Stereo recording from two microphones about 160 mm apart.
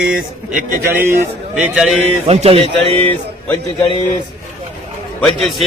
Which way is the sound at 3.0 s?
10° left (ahead or behind).